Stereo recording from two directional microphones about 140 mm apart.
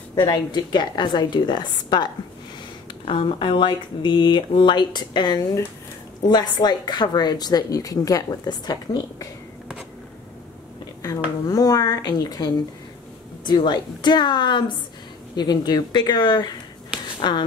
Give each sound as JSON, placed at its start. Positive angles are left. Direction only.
{"t": 0.2, "sound": "speech", "side_deg": 30}
{"t": 3.1, "sound": "speech", "side_deg": 35}
{"t": 11.4, "sound": "speech", "side_deg": 25}